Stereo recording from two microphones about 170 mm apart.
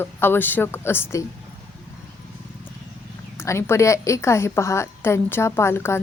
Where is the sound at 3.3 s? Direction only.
15° left (ahead or behind).